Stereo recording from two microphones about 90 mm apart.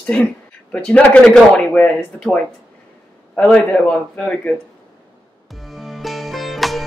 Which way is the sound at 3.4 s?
15° left (ahead or behind).